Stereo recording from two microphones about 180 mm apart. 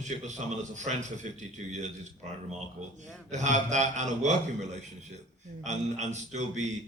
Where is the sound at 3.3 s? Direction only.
40° right (ahead or behind).